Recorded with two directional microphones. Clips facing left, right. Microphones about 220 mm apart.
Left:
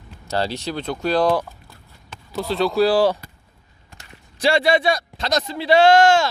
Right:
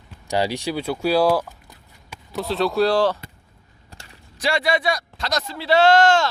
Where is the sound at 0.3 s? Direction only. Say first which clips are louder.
Right 2 dB; 15° right (ahead or behind); by 3.2 s 5° left (ahead or behind).